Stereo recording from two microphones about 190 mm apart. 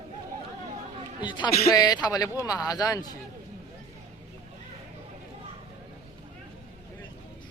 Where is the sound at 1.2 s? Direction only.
25° left (ahead or behind).